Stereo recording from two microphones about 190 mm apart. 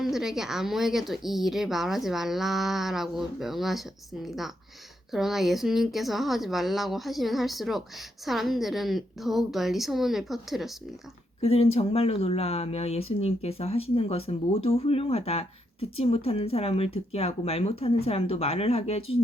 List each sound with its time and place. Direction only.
0.0 s speech: centre (ahead or behind)
11.3 s speech: 30° left (ahead or behind)